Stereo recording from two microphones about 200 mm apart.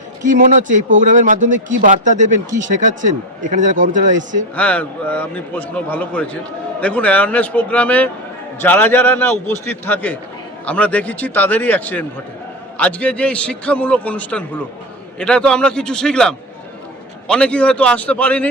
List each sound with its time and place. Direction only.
0.2 s speech: 40° right (ahead or behind)
4.5 s a man's voice: 5° left (ahead or behind)